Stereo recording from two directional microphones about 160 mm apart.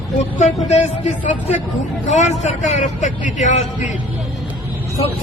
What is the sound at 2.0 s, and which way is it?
Speech, 50° left (ahead or behind).